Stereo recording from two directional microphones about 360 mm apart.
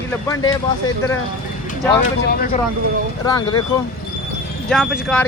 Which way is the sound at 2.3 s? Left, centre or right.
Left.